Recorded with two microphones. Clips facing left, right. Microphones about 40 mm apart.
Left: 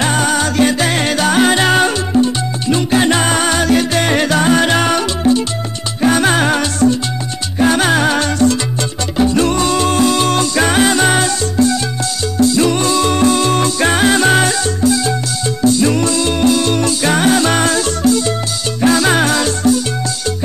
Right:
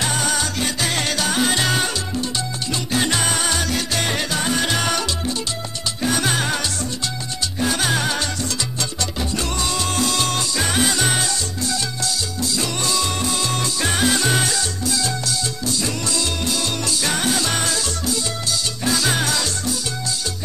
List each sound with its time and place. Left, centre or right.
0.0 s music: left
4.1 s music: left
9.9 s music: left
10.3 s music: left
12.4 s music: left